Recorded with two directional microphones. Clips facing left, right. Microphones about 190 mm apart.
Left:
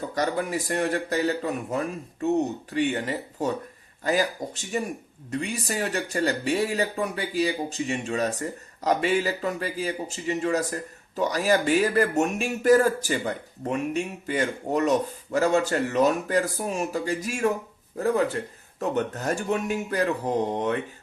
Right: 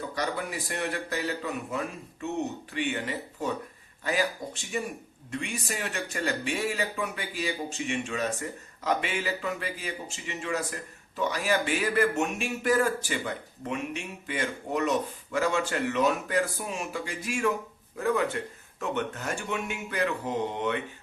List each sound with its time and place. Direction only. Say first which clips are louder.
0.1 s speech: left 8 dB; 45° left (ahead or behind)